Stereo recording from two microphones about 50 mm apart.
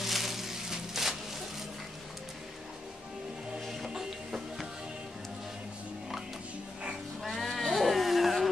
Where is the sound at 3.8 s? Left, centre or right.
Centre.